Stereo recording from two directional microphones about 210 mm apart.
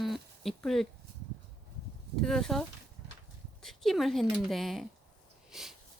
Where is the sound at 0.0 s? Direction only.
Centre (ahead or behind).